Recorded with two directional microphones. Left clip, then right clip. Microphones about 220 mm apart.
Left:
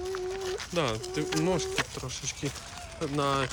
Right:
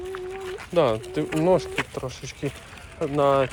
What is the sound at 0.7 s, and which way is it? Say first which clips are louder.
Speech: right 10 dB; centre (ahead or behind).